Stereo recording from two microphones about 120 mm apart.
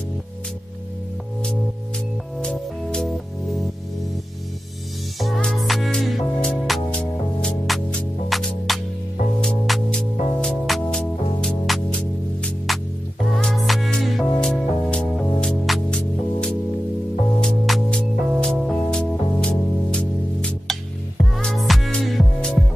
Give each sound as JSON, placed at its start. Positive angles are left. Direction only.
{"t": 2.4, "sound": "music", "side_deg": 5}
{"t": 5.2, "sound": "music", "side_deg": 5}